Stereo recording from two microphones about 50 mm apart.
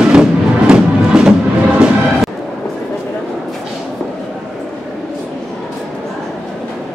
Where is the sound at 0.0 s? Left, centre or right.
Centre.